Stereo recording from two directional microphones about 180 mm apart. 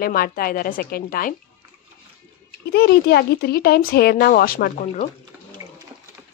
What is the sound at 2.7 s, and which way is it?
A woman's voice, 60° left (ahead or behind).